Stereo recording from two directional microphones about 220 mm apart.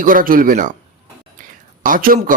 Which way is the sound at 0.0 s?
40° right (ahead or behind).